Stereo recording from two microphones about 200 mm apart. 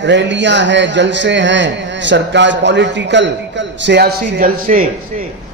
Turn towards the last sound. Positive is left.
turn(degrees=-45)  # may be behind; listen again after turning